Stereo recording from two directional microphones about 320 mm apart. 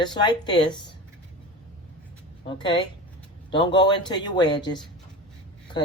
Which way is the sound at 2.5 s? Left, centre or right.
Centre.